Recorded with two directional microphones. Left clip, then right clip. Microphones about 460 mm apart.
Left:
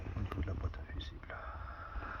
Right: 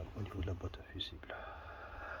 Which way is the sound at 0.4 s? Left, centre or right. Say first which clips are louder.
Right 1 dB; centre.